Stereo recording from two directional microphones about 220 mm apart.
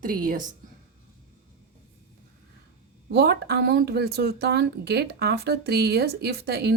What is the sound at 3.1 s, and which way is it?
Speech, 45° right (ahead or behind).